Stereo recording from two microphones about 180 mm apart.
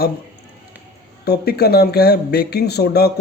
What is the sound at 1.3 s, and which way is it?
Speech, 60° left (ahead or behind).